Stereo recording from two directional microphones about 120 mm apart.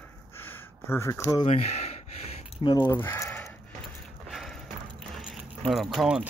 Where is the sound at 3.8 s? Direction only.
Centre (ahead or behind).